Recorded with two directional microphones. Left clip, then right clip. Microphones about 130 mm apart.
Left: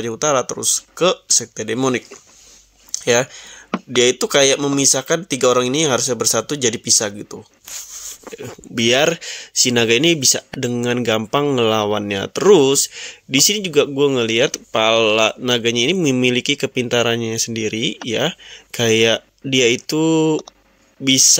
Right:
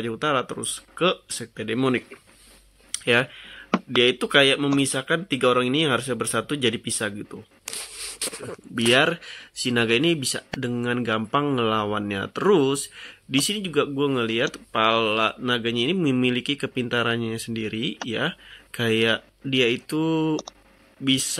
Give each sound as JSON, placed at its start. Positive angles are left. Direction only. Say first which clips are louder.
{"t": 0.0, "sound": "speech", "louder": "left 6 dB", "side_deg": 30}
{"t": 2.9, "sound": "a sound", "louder": "left 5 dB", "side_deg": 35}
{"t": 4.0, "sound": "speech", "louder": "left 4 dB", "side_deg": 35}
{"t": 8.7, "sound": "speech", "louder": "left 4 dB", "side_deg": 60}